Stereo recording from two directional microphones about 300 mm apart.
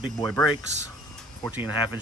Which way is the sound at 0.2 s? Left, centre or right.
Centre.